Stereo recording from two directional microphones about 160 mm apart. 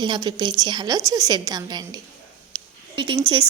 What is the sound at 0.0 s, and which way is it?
A woman's voice, 30° right (ahead or behind).